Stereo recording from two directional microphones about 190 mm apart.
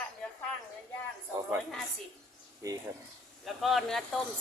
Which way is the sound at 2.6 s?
15° right (ahead or behind).